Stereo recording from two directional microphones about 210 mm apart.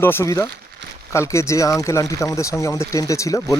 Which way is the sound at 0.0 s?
10° left (ahead or behind).